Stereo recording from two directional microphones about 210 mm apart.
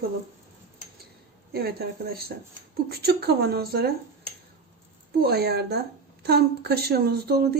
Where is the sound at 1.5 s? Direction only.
45° right (ahead or behind).